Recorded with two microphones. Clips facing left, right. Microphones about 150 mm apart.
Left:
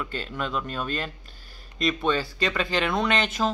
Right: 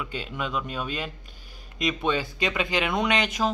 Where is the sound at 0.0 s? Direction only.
10° right (ahead or behind).